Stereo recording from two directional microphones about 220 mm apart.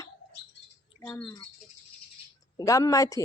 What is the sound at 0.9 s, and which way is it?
Speech, 15° left (ahead or behind).